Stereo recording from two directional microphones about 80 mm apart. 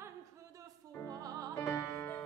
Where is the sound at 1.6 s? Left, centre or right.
Left.